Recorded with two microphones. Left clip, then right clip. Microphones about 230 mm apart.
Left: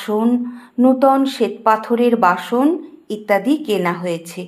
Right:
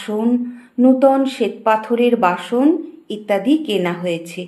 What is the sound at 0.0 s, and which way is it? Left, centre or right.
Speech, centre.